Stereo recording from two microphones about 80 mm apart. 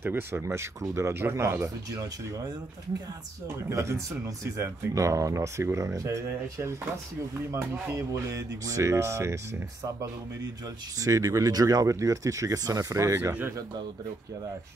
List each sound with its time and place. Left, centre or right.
0.0 s speech: right
3.6 s speech: right
11.0 s speech: right